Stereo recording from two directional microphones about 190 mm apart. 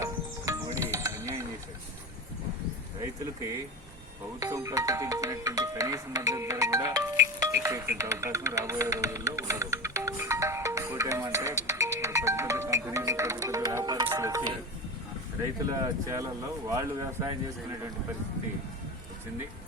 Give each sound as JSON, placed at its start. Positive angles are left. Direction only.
{"t": 0.0, "sound": "music", "side_deg": -15}
{"t": 4.4, "sound": "speech", "side_deg": -15}
{"t": 11.7, "sound": "music", "side_deg": -15}
{"t": 16.0, "sound": "speech", "side_deg": -15}